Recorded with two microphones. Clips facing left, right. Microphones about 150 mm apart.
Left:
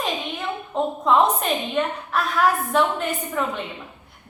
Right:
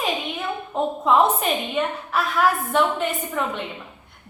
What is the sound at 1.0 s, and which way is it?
A woman's voice, centre (ahead or behind).